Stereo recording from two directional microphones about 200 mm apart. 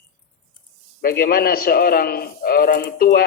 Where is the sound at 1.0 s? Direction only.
50° left (ahead or behind).